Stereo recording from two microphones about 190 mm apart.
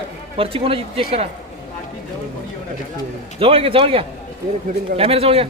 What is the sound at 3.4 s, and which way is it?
A man's voice, 30° right (ahead or behind).